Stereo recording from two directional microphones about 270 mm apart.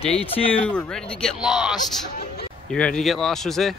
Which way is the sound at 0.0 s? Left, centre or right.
Left.